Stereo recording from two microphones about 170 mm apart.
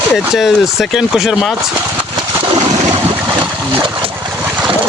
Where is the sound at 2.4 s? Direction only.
30° right (ahead or behind).